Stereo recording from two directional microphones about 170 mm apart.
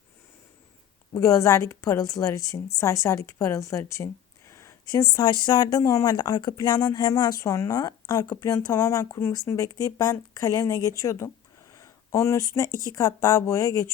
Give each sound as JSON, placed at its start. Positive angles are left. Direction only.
{"t": 1.1, "sound": "speech", "side_deg": 20}